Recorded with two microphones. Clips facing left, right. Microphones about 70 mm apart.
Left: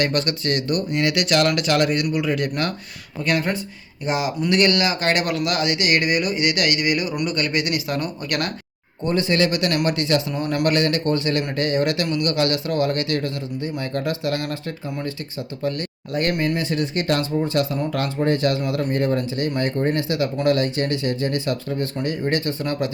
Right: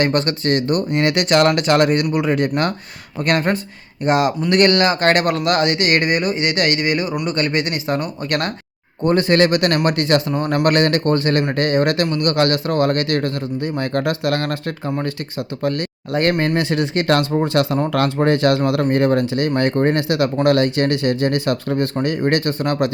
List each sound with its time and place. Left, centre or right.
0.0 s speech: right
9.0 s speech: right
15.6 s speech: right